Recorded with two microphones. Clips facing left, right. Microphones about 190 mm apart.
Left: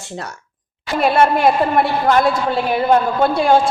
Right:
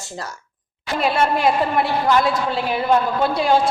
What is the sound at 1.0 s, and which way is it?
A woman's voice, 55° left (ahead or behind).